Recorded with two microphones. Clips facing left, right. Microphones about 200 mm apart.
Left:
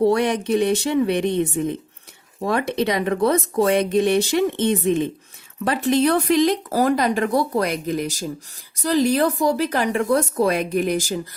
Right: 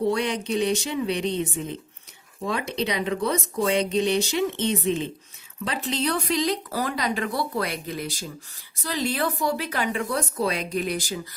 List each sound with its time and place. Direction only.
0.0 s speech: 55° left (ahead or behind)